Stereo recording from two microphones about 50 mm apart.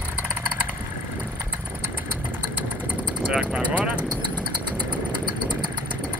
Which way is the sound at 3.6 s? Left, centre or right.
Right.